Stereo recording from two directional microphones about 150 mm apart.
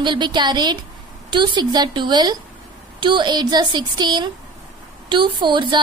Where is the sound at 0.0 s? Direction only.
30° right (ahead or behind).